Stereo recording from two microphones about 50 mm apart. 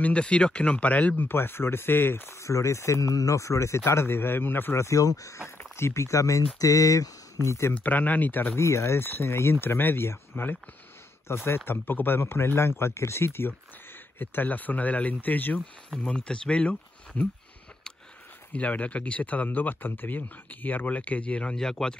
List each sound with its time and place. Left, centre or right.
0.0 s speech: left
1.1 s speech: left
2.4 s speech: left
3.8 s speech: left
4.7 s speech: left
5.8 s speech: left
7.7 s speech: left
8.5 s speech: left
11.2 s speech: left
14.1 s speech: left
16.0 s speech: centre
18.5 s speech: left
21.5 s speech: centre